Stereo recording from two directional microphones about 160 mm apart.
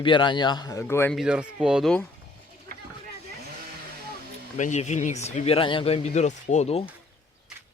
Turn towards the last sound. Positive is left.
turn(degrees=40)  # may be behind; listen again after turning